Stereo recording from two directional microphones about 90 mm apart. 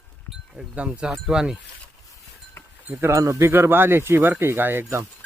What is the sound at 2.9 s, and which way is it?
Speech, 35° right (ahead or behind).